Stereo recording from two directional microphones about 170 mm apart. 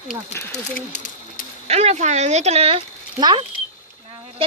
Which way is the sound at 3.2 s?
25° right (ahead or behind).